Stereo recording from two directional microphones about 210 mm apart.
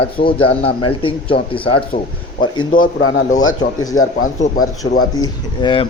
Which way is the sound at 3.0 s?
75° left (ahead or behind).